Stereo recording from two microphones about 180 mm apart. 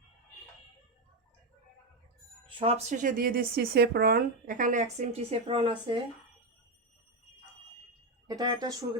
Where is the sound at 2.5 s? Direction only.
30° right (ahead or behind).